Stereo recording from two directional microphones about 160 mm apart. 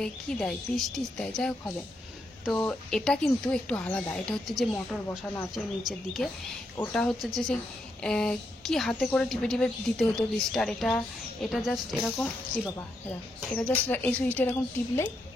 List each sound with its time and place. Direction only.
0.0 s a woman's voice: 5° left (ahead or behind)
2.5 s a woman's voice: 10° left (ahead or behind)